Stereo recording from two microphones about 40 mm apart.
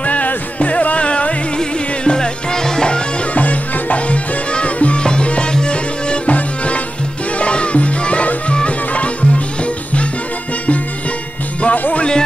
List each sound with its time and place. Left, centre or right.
0.0 s music: left; by 3.0 s centre
3.3 s music: left
11.6 s music: left